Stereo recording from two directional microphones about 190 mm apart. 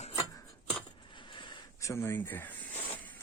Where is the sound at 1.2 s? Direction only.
25° left (ahead or behind).